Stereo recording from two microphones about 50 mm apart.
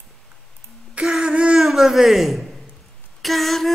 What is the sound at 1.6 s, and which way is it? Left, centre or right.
A man's voice, centre.